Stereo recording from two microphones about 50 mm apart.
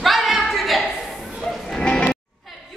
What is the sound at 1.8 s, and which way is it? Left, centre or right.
Music, centre.